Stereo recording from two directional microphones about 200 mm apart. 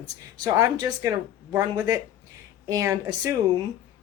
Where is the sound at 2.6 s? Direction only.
15° right (ahead or behind).